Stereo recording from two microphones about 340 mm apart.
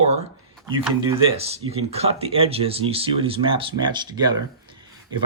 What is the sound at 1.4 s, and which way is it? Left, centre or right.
Speech, centre.